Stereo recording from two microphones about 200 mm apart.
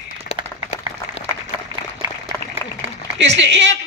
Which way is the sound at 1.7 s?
15° right (ahead or behind).